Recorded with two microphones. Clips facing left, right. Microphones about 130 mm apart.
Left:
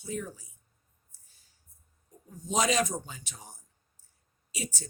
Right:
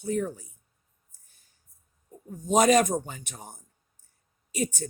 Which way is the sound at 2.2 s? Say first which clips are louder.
Right 7 dB; 50° right (ahead or behind).